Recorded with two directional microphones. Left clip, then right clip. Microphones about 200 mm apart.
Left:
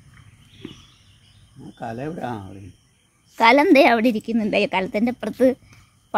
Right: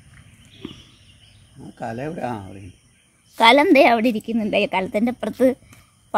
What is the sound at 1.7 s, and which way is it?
Speech, 15° right (ahead or behind).